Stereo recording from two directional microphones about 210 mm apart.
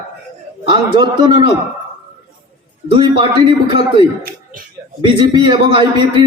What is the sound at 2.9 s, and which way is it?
Speech, 20° right (ahead or behind).